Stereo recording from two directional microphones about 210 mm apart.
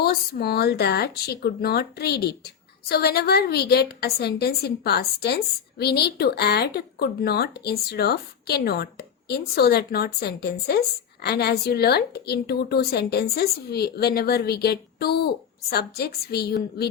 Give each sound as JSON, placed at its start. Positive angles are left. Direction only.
{"t": 0.0, "sound": "a woman's voice", "side_deg": 50}